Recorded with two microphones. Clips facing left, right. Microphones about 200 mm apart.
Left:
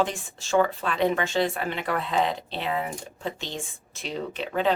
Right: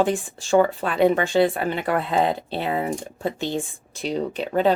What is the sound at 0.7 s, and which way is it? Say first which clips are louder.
Speech: right 5 dB; 45° right (ahead or behind).